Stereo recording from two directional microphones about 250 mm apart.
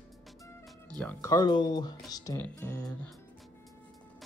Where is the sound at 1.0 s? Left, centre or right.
Centre.